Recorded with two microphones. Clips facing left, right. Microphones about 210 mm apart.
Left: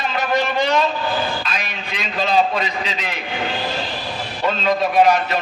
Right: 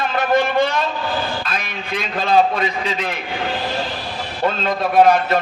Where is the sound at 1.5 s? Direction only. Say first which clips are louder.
Right 3 dB; 55° right (ahead or behind).